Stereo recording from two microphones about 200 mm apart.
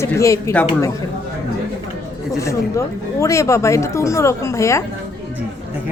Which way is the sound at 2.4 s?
15° left (ahead or behind).